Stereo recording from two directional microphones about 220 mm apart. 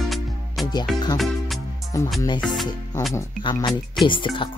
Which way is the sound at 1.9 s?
15° left (ahead or behind).